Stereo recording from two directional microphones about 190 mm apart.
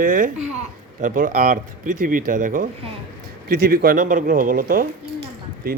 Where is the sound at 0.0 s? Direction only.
45° right (ahead or behind).